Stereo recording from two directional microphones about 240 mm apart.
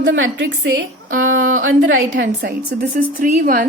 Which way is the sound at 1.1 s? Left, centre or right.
Right.